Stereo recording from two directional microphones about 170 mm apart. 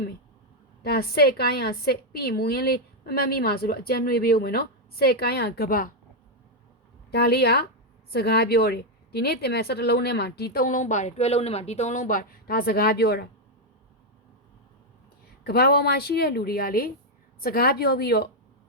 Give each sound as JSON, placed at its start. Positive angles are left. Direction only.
{"t": 0.9, "sound": "a woman's voice", "side_deg": 65}
{"t": 7.1, "sound": "a woman's voice", "side_deg": 70}
{"t": 15.4, "sound": "a woman's voice", "side_deg": 65}